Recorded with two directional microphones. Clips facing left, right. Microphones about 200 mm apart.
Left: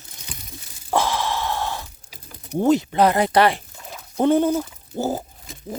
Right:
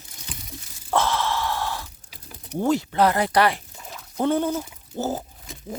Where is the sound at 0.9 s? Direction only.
10° left (ahead or behind).